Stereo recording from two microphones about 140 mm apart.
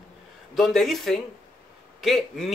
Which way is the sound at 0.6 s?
Centre (ahead or behind).